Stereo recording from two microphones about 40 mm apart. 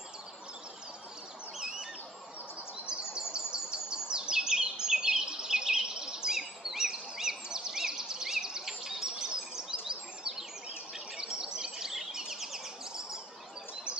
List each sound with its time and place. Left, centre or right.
2.9 s bird: centre
3.3 s bird vocalization: centre
11.1 s chirp: centre